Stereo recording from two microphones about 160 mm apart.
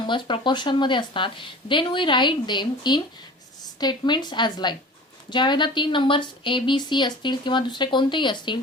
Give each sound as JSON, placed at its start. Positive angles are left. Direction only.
{"t": 0.0, "sound": "a woman's voice", "side_deg": 30}